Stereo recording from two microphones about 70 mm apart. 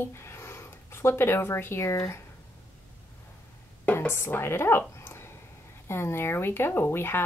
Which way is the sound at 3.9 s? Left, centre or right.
Left.